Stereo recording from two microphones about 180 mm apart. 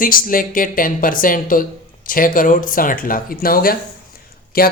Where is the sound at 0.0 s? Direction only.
50° left (ahead or behind).